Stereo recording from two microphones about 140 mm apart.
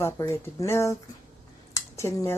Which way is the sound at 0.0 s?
20° left (ahead or behind).